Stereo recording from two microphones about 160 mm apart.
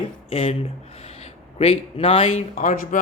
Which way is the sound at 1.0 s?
40° left (ahead or behind).